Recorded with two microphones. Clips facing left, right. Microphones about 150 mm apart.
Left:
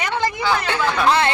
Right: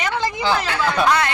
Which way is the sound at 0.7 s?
25° left (ahead or behind).